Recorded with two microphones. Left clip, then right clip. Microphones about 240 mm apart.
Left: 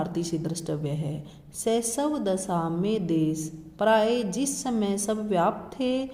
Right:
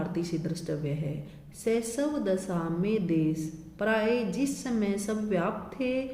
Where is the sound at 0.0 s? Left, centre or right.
Left.